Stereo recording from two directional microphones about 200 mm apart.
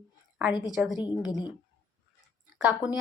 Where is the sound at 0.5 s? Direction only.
20° left (ahead or behind).